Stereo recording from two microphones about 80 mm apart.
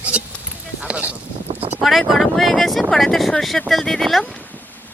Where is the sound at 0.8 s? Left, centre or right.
Centre.